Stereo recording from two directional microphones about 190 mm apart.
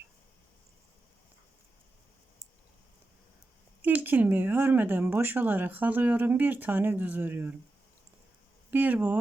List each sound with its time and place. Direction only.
3.8 s speech: 10° right (ahead or behind)
8.7 s speech: 10° right (ahead or behind)